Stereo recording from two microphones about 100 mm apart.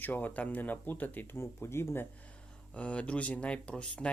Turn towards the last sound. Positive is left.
turn(degrees=10)  # may be behind; listen again after turning